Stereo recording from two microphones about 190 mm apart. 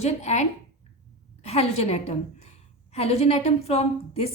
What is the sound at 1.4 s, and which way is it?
A woman's voice, 35° left (ahead or behind).